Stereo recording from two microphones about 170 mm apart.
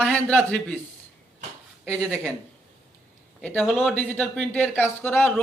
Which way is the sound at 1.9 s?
5° left (ahead or behind).